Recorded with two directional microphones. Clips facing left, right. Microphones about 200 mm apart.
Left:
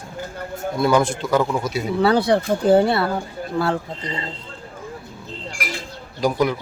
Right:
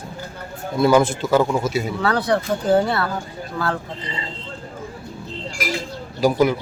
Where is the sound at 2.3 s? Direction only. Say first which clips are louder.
Left 2 dB; 30° left (ahead or behind).